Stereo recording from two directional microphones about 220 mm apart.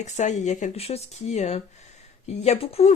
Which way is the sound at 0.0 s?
30° left (ahead or behind).